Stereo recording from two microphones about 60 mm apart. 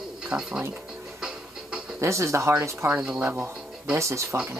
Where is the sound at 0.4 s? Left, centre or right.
Centre.